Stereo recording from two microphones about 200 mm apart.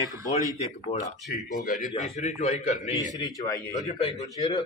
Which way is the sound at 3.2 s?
20° left (ahead or behind).